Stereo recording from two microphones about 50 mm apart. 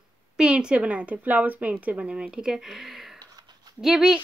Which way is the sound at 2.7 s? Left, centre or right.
Centre.